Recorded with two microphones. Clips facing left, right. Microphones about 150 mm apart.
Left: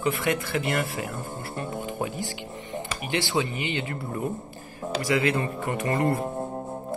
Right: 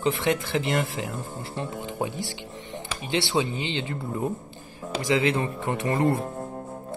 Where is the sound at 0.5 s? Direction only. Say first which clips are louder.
Right 1 dB; 20° right (ahead or behind).